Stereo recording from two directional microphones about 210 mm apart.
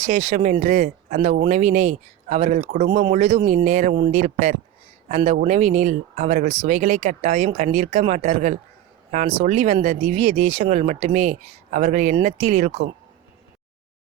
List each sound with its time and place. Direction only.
0.0 s speech: 30° right (ahead or behind)